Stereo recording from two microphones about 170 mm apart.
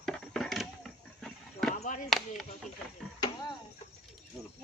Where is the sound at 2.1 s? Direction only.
Centre (ahead or behind).